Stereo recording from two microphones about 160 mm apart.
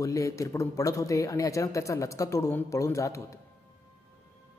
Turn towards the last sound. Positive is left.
turn(degrees=20)  # may be behind; listen again after turning